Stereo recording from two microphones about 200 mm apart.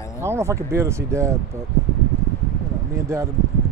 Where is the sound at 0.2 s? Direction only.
15° right (ahead or behind).